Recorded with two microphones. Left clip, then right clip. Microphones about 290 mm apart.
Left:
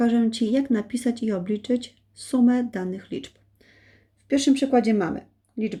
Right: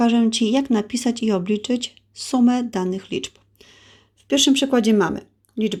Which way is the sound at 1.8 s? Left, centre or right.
Right.